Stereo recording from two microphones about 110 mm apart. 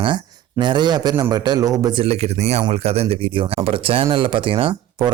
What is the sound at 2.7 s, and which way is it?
Speech, 65° right (ahead or behind).